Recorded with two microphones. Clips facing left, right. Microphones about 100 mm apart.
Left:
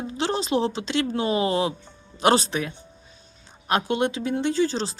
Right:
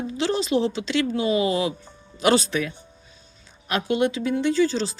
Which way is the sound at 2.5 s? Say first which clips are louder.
Right 2 dB; 25° left (ahead or behind).